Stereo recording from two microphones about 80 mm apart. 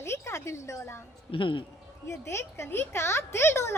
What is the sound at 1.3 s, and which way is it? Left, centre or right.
Speech, left.